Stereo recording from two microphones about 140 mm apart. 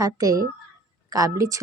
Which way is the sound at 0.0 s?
25° right (ahead or behind).